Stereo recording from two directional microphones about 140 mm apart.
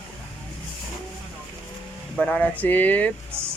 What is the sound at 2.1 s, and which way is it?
Speech, 10° left (ahead or behind).